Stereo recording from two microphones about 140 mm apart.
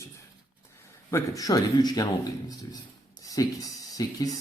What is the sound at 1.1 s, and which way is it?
Speech, 25° left (ahead or behind).